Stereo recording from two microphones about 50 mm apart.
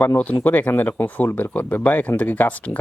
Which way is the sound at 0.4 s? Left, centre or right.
Left.